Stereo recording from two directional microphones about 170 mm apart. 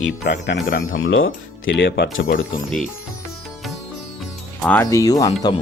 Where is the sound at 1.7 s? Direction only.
90° left.